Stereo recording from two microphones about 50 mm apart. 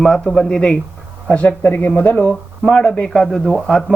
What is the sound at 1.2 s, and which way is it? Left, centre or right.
Speech, left.